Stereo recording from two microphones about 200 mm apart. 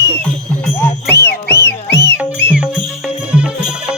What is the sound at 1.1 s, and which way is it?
Music, 55° left (ahead or behind).